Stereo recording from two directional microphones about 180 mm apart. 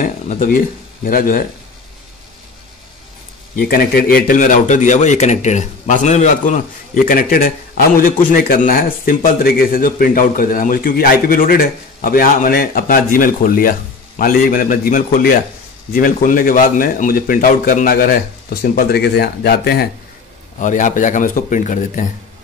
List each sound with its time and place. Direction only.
0.0 s a man's voice: 50° left (ahead or behind)
3.5 s a man's voice: 55° left (ahead or behind)
20.5 s a man's voice: 45° left (ahead or behind)